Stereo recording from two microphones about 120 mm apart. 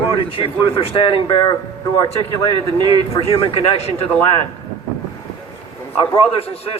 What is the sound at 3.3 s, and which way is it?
Speech, 50° left (ahead or behind).